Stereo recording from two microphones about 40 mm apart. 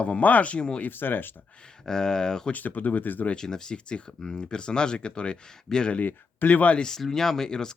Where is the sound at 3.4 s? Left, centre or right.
Centre.